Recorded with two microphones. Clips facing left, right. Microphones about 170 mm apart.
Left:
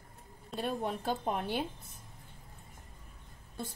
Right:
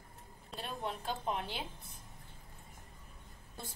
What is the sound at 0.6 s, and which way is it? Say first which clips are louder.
Speech: left 6 dB; 50° left (ahead or behind).